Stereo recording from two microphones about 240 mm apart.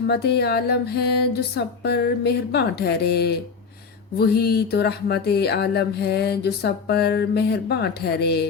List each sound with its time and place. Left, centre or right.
0.1 s speech: left